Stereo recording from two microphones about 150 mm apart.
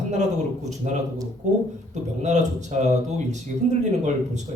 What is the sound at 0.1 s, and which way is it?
Speech, 50° right (ahead or behind).